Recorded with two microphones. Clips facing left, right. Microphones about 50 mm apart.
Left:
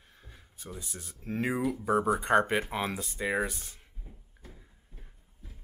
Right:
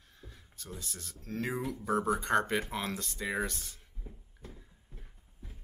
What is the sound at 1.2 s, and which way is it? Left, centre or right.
Speech, centre.